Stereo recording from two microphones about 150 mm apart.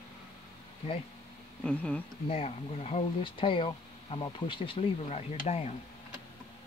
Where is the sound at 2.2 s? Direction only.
40° left (ahead or behind).